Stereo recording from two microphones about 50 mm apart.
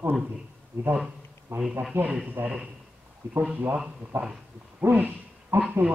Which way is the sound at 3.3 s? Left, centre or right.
Right.